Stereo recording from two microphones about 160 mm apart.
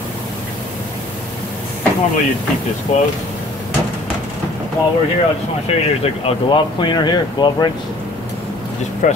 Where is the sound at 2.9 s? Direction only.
45° left (ahead or behind).